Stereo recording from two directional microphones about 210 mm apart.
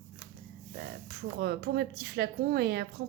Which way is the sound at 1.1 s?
50° right (ahead or behind).